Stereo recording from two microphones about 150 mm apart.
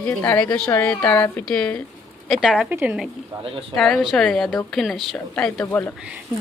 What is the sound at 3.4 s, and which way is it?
Speech, 40° right (ahead or behind).